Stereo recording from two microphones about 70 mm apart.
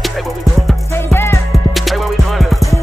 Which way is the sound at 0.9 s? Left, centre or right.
Left.